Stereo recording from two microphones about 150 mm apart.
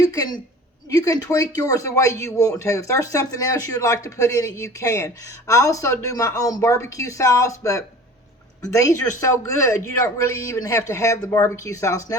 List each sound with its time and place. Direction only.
0.0 s speech: 25° left (ahead or behind)
10.0 s speech: 20° left (ahead or behind)